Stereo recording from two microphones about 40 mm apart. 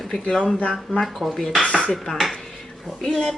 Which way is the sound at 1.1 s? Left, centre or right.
Centre.